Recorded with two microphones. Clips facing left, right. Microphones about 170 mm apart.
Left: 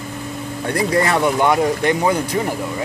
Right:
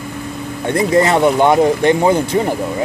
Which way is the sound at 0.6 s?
25° right (ahead or behind).